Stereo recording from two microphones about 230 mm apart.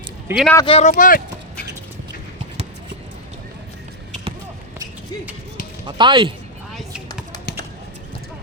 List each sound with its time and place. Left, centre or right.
0.3 s speech: centre
0.5 s speech: left
5.8 s speech: right